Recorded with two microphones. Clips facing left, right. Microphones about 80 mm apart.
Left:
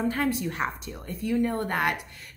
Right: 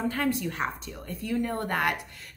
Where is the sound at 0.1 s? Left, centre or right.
Centre.